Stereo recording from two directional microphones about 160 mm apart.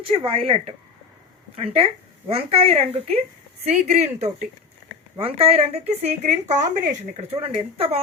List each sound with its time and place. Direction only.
0.0 s speech: 35° right (ahead or behind)